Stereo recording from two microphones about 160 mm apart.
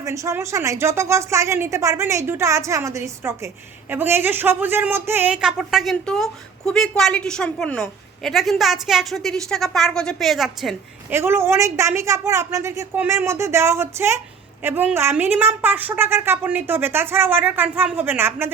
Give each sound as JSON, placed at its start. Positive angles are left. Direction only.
{"t": 0.0, "sound": "a woman's voice", "side_deg": -20}
{"t": 11.1, "sound": "a woman's voice", "side_deg": -15}